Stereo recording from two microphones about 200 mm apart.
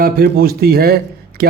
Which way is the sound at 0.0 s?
50° right (ahead or behind).